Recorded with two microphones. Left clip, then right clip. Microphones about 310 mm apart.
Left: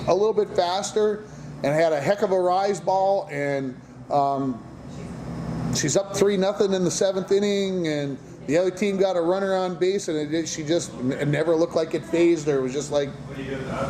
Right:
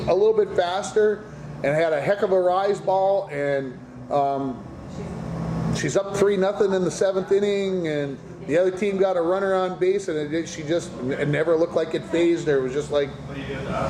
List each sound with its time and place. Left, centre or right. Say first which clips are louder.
0.1 s a man's voice: right 2 dB; left
5.7 s a man's voice: even; left